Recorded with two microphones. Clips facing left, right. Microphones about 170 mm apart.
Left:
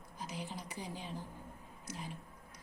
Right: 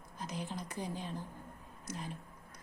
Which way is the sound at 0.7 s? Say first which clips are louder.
Right 4 dB; 50° right (ahead or behind).